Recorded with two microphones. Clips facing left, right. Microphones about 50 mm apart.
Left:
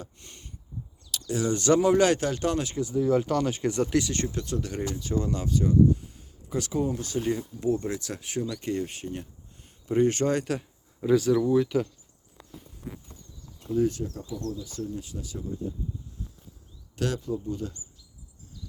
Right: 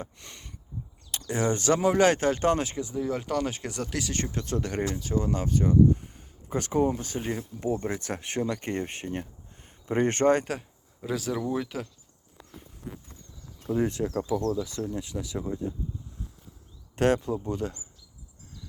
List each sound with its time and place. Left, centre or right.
0.0 s a sound: right
1.3 s speech: right
1.6 s speech: centre
2.7 s speech: centre
4.0 s speech: centre
4.5 s speech: right
4.9 s speech: centre
5.2 s speech: right
10.4 s speech: centre
11.0 s speech: centre
13.7 s speech: right
14.1 s speech: right
16.9 s speech: right